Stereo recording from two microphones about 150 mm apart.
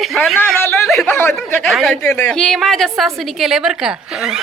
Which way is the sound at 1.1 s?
15° left (ahead or behind).